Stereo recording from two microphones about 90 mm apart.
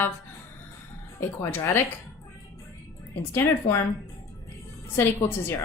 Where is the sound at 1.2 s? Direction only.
25° left (ahead or behind).